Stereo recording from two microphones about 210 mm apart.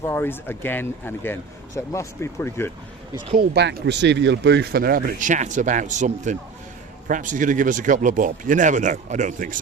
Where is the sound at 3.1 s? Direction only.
25° right (ahead or behind).